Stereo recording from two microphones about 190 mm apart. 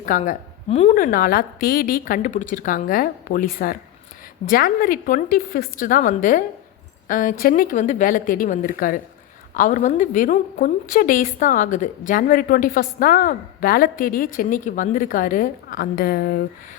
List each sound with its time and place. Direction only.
0.0 s a woman's voice: 45° left (ahead or behind)
0.9 s a woman's voice: 45° left (ahead or behind)